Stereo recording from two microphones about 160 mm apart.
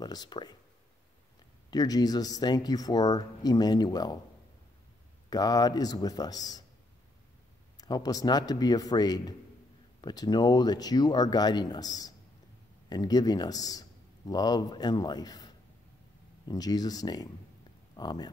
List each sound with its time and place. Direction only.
0.0 s speech: 25° left (ahead or behind)
1.7 s speech: 25° left (ahead or behind)
5.3 s speech: 25° left (ahead or behind)
7.8 s speech: 25° left (ahead or behind)